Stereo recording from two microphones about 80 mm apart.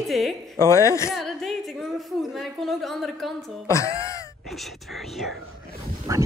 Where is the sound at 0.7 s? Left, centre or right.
Left.